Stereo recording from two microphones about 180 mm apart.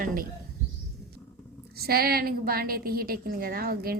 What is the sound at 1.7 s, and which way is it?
A woman's voice, 60° right (ahead or behind).